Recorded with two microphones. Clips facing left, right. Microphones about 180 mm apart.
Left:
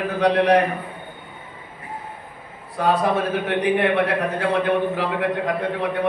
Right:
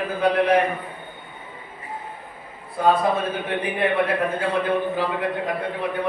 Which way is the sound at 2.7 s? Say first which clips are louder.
Even; 90° left.